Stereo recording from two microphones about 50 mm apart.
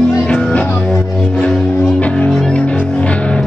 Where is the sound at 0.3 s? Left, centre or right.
Left.